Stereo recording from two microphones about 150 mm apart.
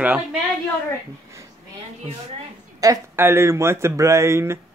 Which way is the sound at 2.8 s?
20° right (ahead or behind).